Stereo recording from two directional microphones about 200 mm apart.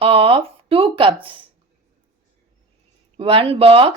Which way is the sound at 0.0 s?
30° right (ahead or behind).